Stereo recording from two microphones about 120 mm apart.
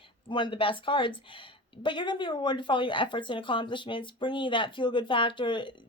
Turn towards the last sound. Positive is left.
turn(degrees=40)  # may be behind; listen again after turning